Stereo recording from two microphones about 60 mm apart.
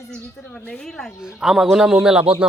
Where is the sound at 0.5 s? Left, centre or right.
Left.